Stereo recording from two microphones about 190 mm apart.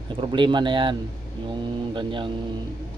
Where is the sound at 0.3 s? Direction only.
25° right (ahead or behind).